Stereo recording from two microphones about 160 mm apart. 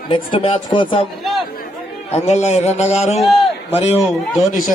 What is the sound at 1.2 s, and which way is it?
Chatter, centre (ahead or behind).